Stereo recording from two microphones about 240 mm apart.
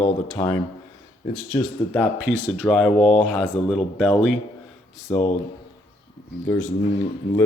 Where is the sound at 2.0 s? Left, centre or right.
Centre.